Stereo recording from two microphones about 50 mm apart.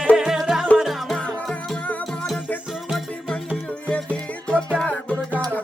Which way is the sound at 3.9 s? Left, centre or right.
Left.